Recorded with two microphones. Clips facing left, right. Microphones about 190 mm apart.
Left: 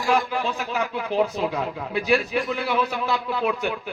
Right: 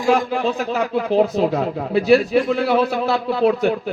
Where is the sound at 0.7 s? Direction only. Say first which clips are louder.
Right 7 dB; 45° right (ahead or behind).